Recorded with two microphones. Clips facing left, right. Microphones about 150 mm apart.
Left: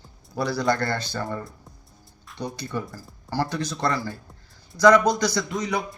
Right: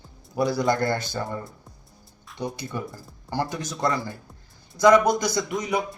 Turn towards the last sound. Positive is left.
turn(degrees=-25)  # may be behind; listen again after turning